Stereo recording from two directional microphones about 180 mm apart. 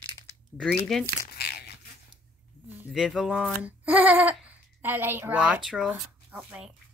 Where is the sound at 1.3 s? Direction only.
60° left (ahead or behind).